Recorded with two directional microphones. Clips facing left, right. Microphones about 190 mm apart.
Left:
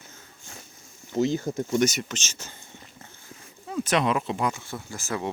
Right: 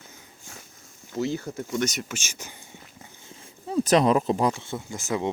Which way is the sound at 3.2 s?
30° right (ahead or behind).